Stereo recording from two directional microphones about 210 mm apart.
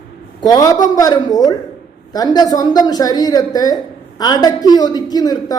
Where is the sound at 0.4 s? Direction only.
15° left (ahead or behind).